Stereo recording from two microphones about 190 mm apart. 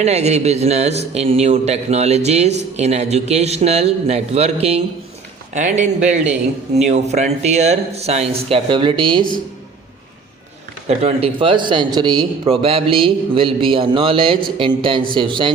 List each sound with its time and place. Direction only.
0.0 s a man's voice: 35° right (ahead or behind)
10.8 s a man's voice: 30° right (ahead or behind)